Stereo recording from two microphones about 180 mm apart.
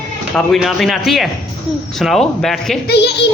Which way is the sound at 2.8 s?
65° left (ahead or behind).